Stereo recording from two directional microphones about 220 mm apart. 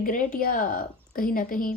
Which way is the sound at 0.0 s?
35° left (ahead or behind).